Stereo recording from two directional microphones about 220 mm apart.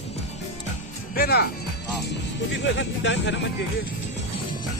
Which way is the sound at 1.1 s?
45° left (ahead or behind).